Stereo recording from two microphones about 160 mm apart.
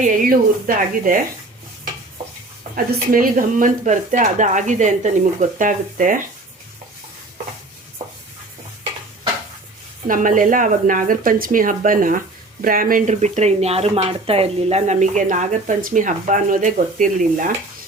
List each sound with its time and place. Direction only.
0.0 s speech: 55° right (ahead or behind)
2.7 s speech: 60° right (ahead or behind)
10.1 s speech: 55° right (ahead or behind)